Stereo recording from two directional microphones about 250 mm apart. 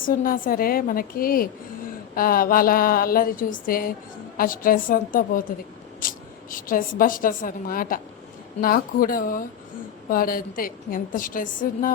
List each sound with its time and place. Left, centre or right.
0.0 s a woman's voice: left